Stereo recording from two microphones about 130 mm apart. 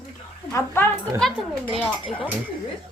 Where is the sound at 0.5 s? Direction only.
15° left (ahead or behind).